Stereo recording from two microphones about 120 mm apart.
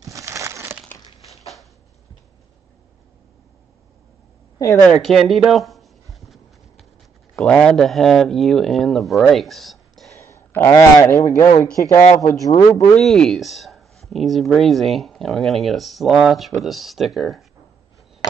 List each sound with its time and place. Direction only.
0.0 s crumpling: 25° right (ahead or behind)
4.8 s a sound: centre (ahead or behind)
7.3 s speech: 5° left (ahead or behind)
10.1 s a sound: 25° left (ahead or behind)
10.7 s a man's voice: 30° left (ahead or behind)
12.9 s speech: 5° left (ahead or behind)